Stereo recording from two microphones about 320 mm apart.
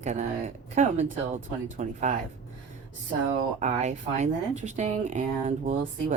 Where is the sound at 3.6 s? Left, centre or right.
Right.